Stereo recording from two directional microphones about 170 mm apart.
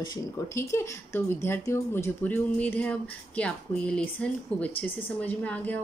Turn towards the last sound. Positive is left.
turn(degrees=10)  # may be behind; listen again after turning